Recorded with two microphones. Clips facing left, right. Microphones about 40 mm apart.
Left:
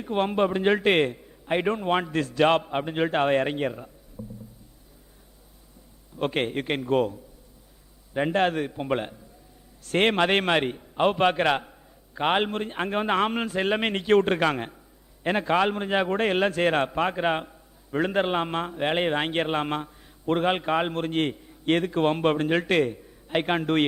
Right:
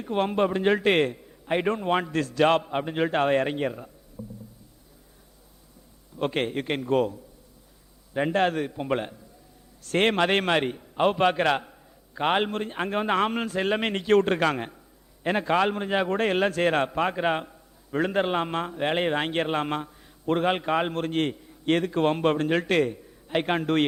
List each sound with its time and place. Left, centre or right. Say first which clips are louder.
0.0 s a man's voice: even; centre
4.2 s rowboat: even; centre
6.1 s a man's voice: even; centre